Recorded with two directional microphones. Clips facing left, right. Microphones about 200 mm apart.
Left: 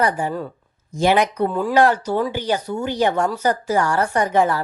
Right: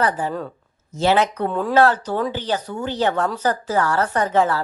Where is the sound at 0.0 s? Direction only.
10° left (ahead or behind).